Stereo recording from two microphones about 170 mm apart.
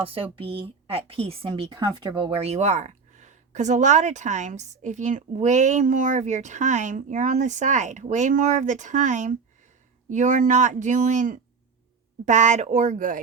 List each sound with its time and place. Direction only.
0.0 s speech: 30° right (ahead or behind); by 13.2 s 50° right (ahead or behind)